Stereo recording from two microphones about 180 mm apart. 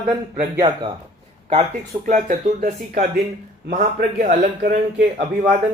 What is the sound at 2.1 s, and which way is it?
A man's voice, 45° right (ahead or behind).